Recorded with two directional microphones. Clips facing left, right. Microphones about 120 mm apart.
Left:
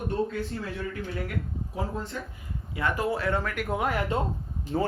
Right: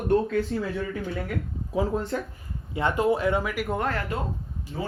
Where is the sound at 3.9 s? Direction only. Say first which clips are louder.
Left 1 dB; 20° left (ahead or behind).